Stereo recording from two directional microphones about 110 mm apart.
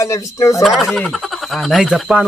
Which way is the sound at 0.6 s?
5° left (ahead or behind).